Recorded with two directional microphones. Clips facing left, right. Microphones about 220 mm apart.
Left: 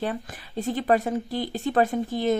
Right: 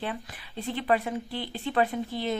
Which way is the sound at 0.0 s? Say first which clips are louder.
Left 5 dB; 45° left (ahead or behind).